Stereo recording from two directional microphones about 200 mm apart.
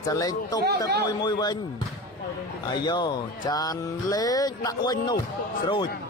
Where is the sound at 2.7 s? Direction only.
20° left (ahead or behind).